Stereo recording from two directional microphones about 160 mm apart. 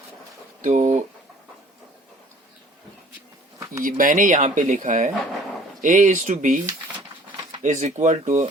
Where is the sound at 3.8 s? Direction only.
60° right (ahead or behind).